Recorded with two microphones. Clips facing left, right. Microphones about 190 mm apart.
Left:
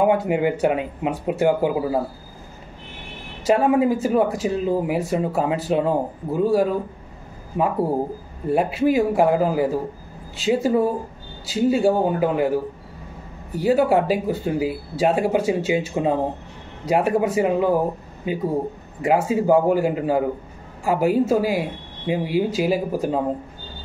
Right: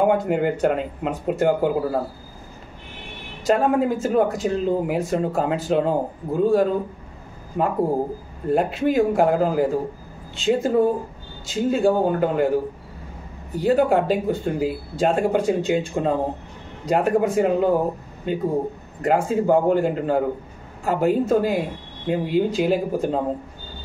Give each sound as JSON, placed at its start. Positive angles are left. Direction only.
{"t": 0.0, "sound": "speech", "side_deg": 5}
{"t": 3.4, "sound": "speech", "side_deg": 5}
{"t": 13.6, "sound": "speech", "side_deg": 5}
{"t": 18.9, "sound": "speech", "side_deg": 5}